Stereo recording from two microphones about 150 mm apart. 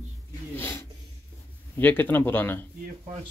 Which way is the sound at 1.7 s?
10° left (ahead or behind).